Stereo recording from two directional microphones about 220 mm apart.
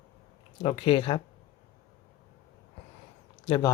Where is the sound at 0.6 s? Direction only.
25° left (ahead or behind).